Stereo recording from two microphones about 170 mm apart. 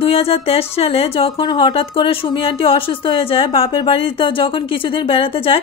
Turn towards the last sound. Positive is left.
turn(degrees=30)  # may be behind; listen again after turning